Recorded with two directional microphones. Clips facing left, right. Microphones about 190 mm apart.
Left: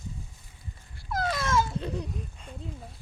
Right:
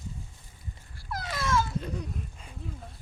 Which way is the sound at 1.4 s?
25° left (ahead or behind).